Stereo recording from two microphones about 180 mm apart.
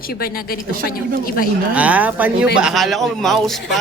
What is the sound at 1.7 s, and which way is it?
Speech, 10° right (ahead or behind).